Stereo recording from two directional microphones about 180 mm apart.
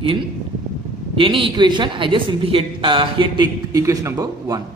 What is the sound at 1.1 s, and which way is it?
A woman's voice, 30° right (ahead or behind).